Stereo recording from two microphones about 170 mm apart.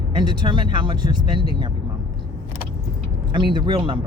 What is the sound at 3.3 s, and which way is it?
Speech, 30° right (ahead or behind).